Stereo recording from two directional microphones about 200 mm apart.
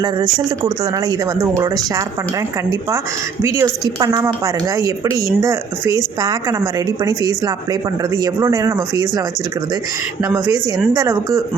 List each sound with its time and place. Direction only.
0.6 s a woman's voice: 15° right (ahead or behind)
3.4 s a woman's voice: 15° right (ahead or behind)
10.2 s speech: 20° right (ahead or behind)